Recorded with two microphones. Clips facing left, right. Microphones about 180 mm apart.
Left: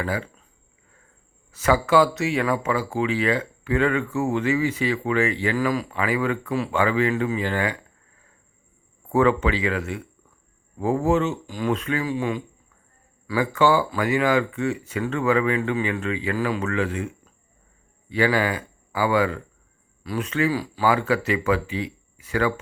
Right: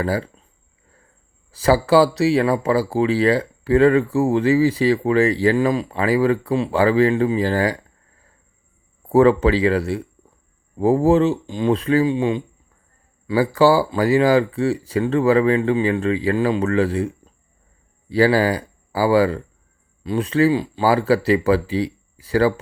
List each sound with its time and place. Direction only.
0.0 s speech: 35° right (ahead or behind)
1.5 s speech: 35° right (ahead or behind)
9.0 s speech: 35° right (ahead or behind)